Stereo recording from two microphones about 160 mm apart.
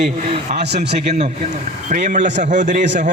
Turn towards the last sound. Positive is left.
turn(degrees=-50)  # may be behind; listen again after turning